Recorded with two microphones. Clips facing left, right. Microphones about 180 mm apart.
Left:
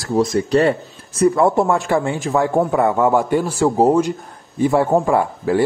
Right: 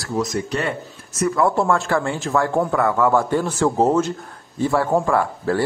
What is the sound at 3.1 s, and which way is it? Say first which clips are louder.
A man's voice: left 2 dB; 15° left (ahead or behind).